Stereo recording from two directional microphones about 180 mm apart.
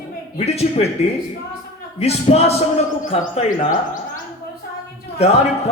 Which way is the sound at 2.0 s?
35° left (ahead or behind).